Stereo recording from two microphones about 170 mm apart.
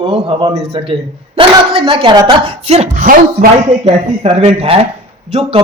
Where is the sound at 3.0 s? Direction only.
55° right (ahead or behind).